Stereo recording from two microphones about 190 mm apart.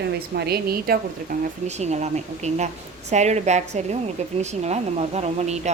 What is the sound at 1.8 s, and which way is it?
A woman's voice, 35° right (ahead or behind).